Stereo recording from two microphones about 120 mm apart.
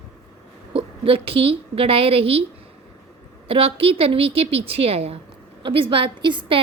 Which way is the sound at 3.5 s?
50° right (ahead or behind).